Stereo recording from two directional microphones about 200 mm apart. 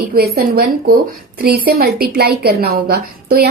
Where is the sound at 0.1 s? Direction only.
50° right (ahead or behind).